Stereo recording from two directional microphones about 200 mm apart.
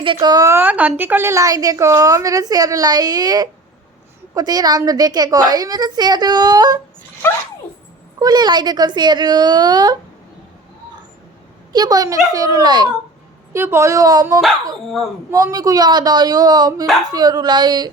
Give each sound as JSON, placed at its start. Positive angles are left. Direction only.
{"t": 0.0, "sound": "a woman's voice", "side_deg": -25}
{"t": 8.2, "sound": "a woman's voice", "side_deg": -20}
{"t": 11.7, "sound": "a woman's voice", "side_deg": -20}